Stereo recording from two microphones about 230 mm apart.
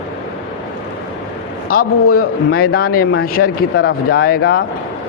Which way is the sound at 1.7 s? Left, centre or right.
Left.